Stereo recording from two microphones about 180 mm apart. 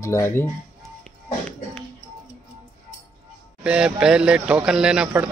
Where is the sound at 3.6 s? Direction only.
5° right (ahead or behind).